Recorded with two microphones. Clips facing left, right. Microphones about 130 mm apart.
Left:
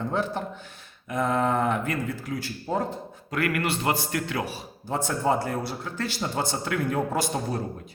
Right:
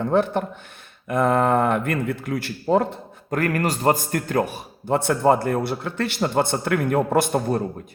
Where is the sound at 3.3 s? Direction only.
40° right (ahead or behind); by 7.6 s 55° right (ahead or behind).